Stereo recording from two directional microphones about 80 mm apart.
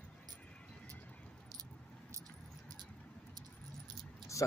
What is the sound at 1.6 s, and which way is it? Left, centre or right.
Keys jangling, right.